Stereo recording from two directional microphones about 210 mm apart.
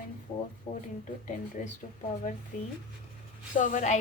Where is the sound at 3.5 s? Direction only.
35° left (ahead or behind).